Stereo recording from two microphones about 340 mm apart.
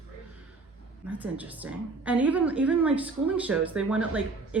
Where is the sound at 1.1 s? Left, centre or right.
Centre.